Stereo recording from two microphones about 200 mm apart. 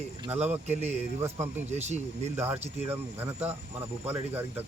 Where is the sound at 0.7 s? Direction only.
35° right (ahead or behind).